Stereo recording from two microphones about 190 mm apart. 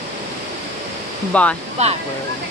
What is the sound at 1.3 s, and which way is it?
Speech, 5° left (ahead or behind).